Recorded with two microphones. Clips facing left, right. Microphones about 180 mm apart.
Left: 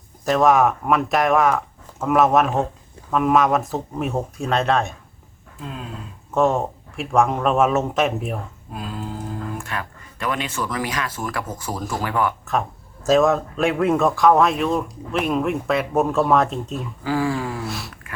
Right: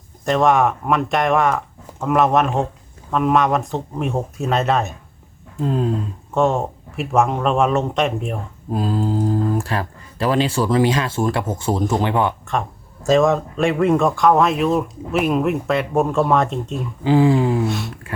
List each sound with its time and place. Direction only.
0.3 s speech: centre (ahead or behind)
5.5 s speech: 40° right (ahead or behind)
6.3 s speech: centre (ahead or behind)
8.7 s speech: 35° right (ahead or behind)
12.5 s speech: centre (ahead or behind)
17.0 s speech: 20° right (ahead or behind)
17.7 s speech: centre (ahead or behind)